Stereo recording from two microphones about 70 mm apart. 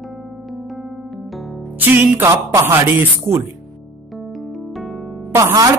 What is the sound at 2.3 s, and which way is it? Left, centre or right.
Speech, right.